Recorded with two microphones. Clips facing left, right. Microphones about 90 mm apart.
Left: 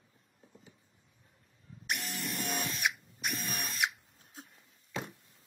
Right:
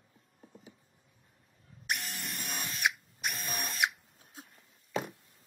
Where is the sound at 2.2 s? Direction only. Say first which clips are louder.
Left 4 dB; 65° left (ahead or behind).